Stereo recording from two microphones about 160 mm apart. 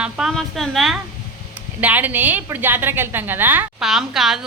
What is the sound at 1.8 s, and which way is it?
A woman's voice, 10° right (ahead or behind).